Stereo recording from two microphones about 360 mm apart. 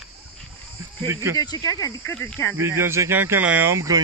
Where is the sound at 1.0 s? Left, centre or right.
Centre.